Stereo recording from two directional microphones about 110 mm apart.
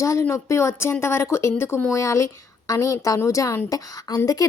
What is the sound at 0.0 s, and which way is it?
A woman's voice, 25° left (ahead or behind).